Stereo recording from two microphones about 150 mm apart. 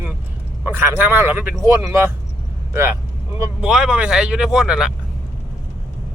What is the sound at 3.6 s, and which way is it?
Speech, 5° right (ahead or behind).